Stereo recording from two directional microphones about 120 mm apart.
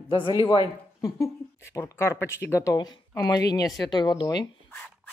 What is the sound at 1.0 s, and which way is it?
Speech, 25° left (ahead or behind).